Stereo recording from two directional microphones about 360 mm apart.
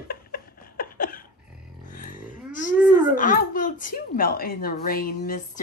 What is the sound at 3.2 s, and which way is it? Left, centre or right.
Speech, left.